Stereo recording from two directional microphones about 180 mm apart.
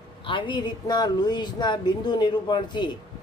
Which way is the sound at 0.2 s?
25° left (ahead or behind).